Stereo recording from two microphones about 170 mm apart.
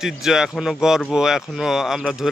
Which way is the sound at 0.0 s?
Centre (ahead or behind).